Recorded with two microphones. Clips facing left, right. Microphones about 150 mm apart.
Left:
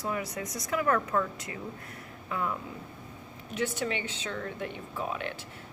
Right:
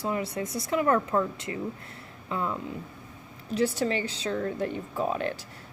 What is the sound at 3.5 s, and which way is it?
A woman's voice, 35° right (ahead or behind).